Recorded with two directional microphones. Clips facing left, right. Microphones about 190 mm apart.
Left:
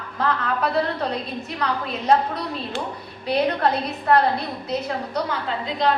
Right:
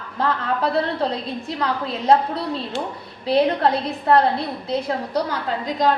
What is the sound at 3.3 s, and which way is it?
Speech, 30° right (ahead or behind).